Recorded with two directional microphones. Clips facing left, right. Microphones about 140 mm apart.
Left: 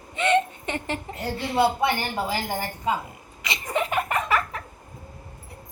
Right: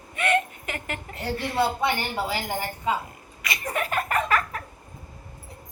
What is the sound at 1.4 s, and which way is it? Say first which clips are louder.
Speech: left 3 dB; 20° left (ahead or behind).